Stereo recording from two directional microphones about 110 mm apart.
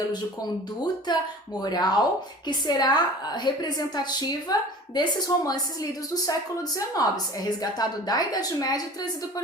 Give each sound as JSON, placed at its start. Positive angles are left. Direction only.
{"t": 1.1, "sound": "a woman's voice", "side_deg": 40}